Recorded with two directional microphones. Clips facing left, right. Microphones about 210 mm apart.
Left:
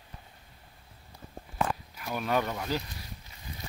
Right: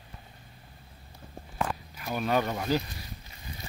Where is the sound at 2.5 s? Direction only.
25° right (ahead or behind).